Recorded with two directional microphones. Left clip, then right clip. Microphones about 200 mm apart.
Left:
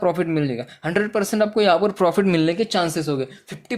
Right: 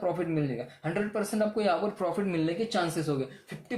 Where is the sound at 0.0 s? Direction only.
40° left (ahead or behind).